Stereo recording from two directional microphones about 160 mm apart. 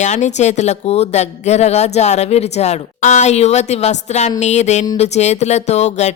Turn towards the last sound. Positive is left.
turn(degrees=45)  # may be behind; listen again after turning